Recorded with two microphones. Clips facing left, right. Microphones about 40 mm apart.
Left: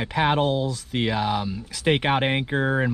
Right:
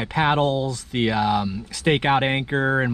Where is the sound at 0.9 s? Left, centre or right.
Centre.